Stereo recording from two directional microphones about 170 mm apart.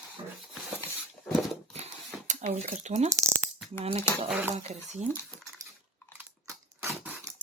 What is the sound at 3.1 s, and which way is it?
Speech, 15° right (ahead or behind).